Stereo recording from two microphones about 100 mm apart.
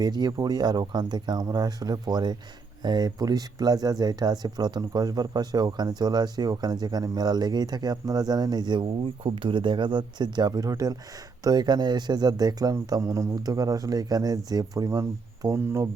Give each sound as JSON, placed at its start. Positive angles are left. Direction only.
{"t": 0.0, "sound": "speech", "side_deg": -45}
{"t": 12.9, "sound": "a man's voice", "side_deg": -30}